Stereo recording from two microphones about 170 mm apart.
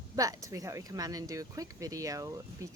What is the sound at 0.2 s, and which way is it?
Speech, 20° right (ahead or behind).